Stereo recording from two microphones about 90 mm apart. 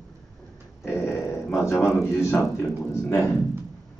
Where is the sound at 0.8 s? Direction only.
30° left (ahead or behind).